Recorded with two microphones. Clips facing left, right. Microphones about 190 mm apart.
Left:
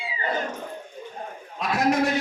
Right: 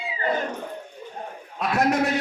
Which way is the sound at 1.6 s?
65° right (ahead or behind).